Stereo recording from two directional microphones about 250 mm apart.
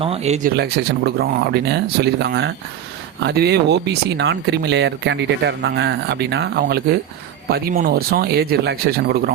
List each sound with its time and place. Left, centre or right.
0.0 s speech: right